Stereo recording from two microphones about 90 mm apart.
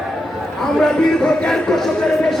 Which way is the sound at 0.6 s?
5° left (ahead or behind).